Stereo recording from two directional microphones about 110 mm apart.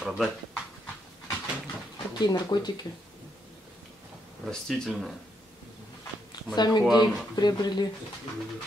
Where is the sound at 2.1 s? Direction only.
40° left (ahead or behind).